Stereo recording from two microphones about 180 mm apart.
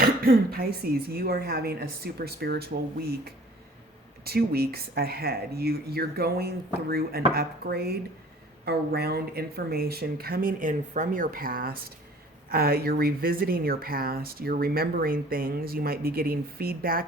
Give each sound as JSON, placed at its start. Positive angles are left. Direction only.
{"t": 0.0, "sound": "speech", "side_deg": -55}